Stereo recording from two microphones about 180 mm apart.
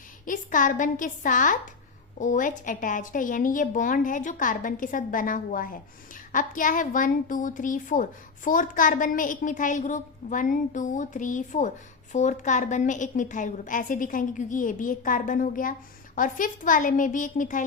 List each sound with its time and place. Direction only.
0.3 s a woman's voice: 45° left (ahead or behind)